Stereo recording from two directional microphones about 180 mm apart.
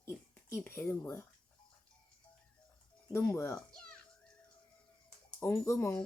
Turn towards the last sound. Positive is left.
turn(degrees=15)  # may be behind; listen again after turning